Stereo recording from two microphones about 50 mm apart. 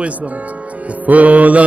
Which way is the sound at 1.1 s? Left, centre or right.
Right.